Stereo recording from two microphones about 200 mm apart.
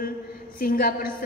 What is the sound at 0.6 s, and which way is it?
Speech, 45° left (ahead or behind).